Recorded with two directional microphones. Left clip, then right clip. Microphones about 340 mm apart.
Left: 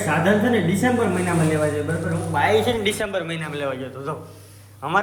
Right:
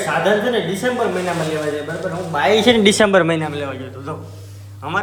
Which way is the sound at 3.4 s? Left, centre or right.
Centre.